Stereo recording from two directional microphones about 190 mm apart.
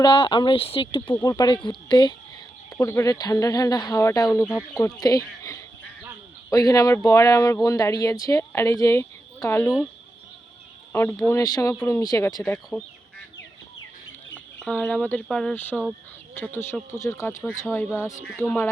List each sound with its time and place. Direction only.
0.0 s a woman's voice: 25° left (ahead or behind)
11.3 s speech: 20° left (ahead or behind)
12.4 s speech: 5° left (ahead or behind)
14.3 s speech: 5° left (ahead or behind)